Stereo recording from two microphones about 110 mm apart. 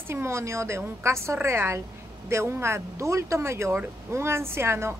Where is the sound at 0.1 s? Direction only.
25° right (ahead or behind).